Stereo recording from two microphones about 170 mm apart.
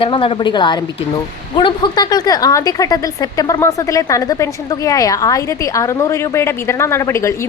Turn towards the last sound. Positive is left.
turn(degrees=15)  # may be behind; listen again after turning